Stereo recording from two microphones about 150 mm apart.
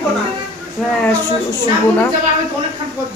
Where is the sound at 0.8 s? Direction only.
Centre (ahead or behind).